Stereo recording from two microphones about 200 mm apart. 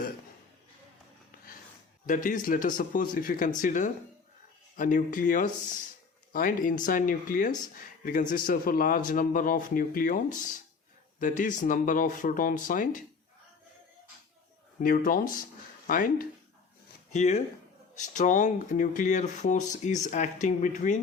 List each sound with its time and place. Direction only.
2.0 s a man's voice: 40° left (ahead or behind)
14.8 s a man's voice: 45° left (ahead or behind)